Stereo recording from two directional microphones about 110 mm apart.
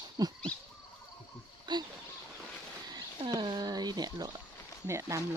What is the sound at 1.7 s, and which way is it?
Speech, 45° right (ahead or behind).